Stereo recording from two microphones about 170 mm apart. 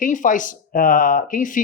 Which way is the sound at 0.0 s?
50° left (ahead or behind).